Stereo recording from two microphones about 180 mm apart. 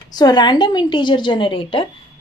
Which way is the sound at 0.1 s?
20° left (ahead or behind).